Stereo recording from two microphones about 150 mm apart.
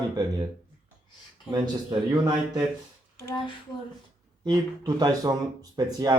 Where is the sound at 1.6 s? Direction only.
30° right (ahead or behind).